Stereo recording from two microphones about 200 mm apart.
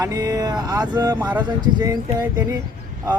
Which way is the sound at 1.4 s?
20° right (ahead or behind).